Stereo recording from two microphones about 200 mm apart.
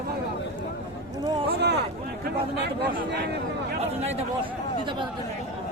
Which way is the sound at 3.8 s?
35° right (ahead or behind).